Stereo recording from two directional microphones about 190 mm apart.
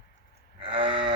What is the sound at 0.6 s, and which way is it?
Livestock, 30° right (ahead or behind).